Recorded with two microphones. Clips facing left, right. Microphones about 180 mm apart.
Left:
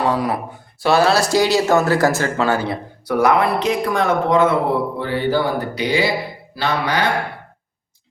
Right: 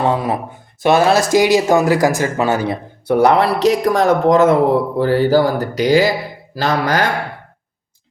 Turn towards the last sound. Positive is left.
turn(degrees=-45)  # may be behind; listen again after turning